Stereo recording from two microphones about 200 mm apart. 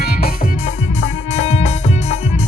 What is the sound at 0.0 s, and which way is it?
Music, 50° left (ahead or behind).